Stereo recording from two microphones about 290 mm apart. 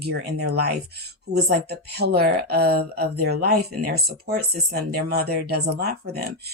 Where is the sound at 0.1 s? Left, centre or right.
Right.